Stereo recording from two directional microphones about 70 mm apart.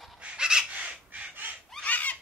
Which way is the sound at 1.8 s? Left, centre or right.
Left.